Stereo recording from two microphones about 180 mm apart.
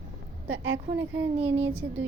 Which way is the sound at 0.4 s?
90° right.